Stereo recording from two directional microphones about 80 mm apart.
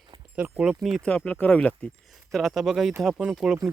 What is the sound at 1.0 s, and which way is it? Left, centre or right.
Speech, centre.